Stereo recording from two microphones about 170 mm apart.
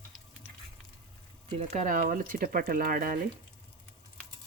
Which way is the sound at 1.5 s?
40° right (ahead or behind).